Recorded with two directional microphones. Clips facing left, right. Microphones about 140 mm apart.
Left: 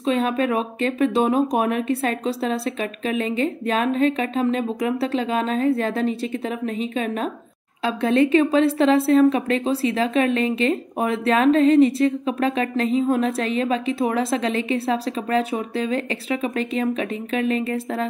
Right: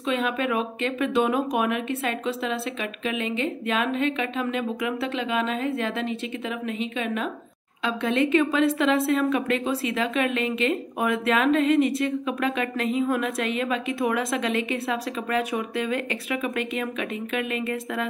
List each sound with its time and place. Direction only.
0.0 s a woman's voice: 35° left (ahead or behind)